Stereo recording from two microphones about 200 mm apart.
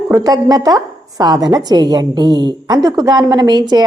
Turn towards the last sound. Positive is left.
turn(degrees=-20)  # may be behind; listen again after turning